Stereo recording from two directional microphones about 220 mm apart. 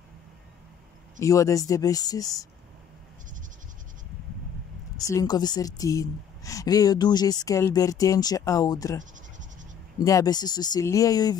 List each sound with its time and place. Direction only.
1.2 s a woman's voice: 15° left (ahead or behind)
4.9 s a woman's voice: 15° left (ahead or behind)